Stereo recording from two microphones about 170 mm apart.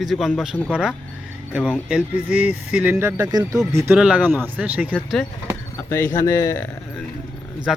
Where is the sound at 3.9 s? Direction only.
5° right (ahead or behind).